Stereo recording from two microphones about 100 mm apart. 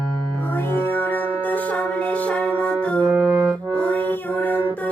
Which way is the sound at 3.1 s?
15° right (ahead or behind).